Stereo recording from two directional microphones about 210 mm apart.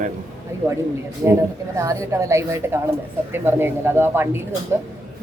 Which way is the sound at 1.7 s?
15° right (ahead or behind).